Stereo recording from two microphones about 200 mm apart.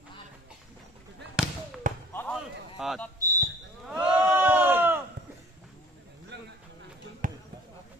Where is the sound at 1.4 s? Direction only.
5° right (ahead or behind).